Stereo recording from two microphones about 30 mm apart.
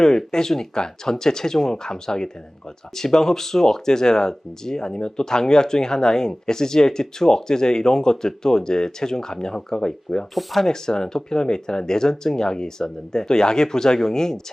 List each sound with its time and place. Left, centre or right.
0.0 s speech: centre
10.3 s speech: centre
10.7 s speech: left